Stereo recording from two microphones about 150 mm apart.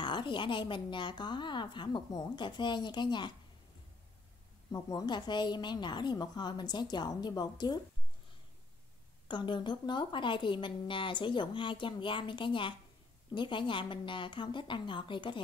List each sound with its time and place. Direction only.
0.0 s a woman's voice: 30° left (ahead or behind)
4.7 s a woman's voice: 25° left (ahead or behind)
9.3 s a woman's voice: 30° left (ahead or behind)